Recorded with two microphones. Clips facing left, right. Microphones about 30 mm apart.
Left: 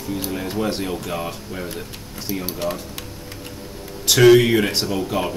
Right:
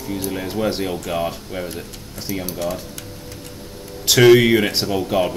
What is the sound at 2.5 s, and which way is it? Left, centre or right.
Speech, left.